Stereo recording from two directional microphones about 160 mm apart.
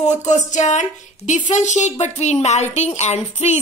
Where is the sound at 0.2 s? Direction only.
45° left (ahead or behind).